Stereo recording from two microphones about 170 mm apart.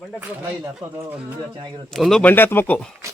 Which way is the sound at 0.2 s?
15° right (ahead or behind).